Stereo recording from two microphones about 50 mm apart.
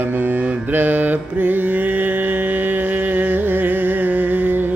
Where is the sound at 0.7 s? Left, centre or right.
Right.